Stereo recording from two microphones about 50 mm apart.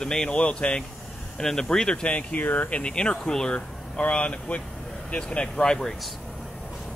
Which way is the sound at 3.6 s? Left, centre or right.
Left.